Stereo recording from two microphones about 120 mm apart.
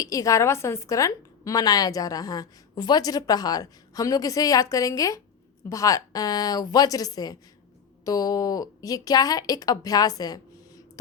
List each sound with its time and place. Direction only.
0.0 s a woman's voice: 30° left (ahead or behind)